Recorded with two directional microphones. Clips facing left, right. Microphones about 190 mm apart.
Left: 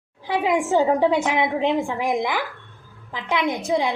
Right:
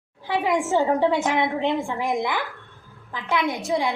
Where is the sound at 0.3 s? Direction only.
15° left (ahead or behind).